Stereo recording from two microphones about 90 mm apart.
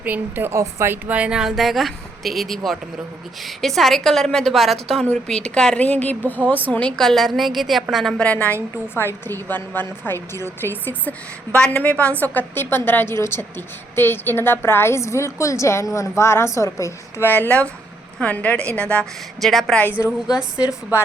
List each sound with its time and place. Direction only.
0.0 s a woman's voice: 20° right (ahead or behind)
1.0 s a woman's voice: 15° right (ahead or behind)
8.2 s a woman's voice: 15° left (ahead or behind)
9.0 s a woman's voice: 25° left (ahead or behind)
11.5 s a woman's voice: 10° left (ahead or behind)
19.4 s speech: centre (ahead or behind)
20.0 s a woman's voice: 40° left (ahead or behind)
20.3 s a woman's voice: 10° right (ahead or behind)